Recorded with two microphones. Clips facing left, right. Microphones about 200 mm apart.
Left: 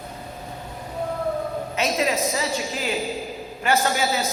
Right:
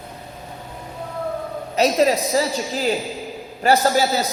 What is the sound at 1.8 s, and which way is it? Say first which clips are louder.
A woman's voice: right 7 dB; 35° right (ahead or behind).